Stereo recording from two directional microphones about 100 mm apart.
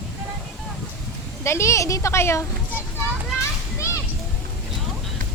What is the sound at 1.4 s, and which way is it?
A woman's voice, 30° left (ahead or behind).